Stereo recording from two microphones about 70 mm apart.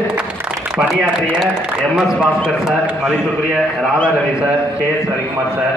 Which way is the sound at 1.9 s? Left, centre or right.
Centre.